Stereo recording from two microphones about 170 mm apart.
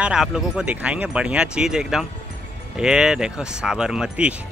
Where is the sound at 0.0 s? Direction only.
5° right (ahead or behind).